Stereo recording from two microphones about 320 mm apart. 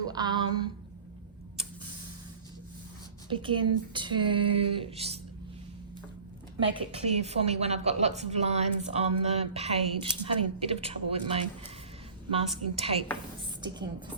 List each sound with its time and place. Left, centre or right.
0.1 s a woman's voice: centre
3.2 s speech: centre
6.6 s a woman's voice: centre